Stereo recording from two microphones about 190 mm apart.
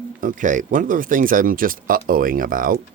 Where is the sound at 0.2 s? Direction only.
45° right (ahead or behind).